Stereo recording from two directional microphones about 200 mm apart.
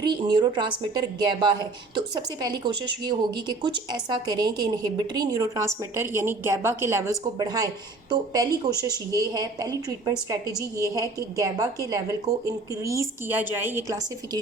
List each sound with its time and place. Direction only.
0.0 s a woman's voice: 25° right (ahead or behind)